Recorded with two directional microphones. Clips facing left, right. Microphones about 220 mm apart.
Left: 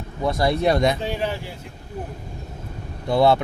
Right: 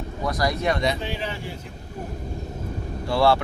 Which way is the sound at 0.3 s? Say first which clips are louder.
Left 4 dB; 25° left (ahead or behind).